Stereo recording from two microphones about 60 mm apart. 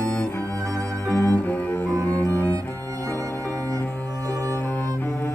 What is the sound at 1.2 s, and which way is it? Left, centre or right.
Cello, left.